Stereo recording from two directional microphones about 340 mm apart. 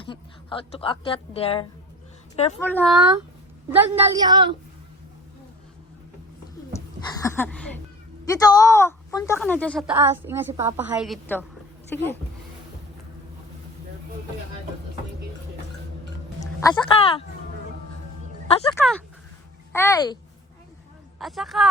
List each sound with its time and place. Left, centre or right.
0.0 s speech: centre
2.6 s a woman's voice: centre
6.7 s a woman's voice: centre
16.4 s speech: centre
18.4 s speech: centre
21.2 s a woman's voice: centre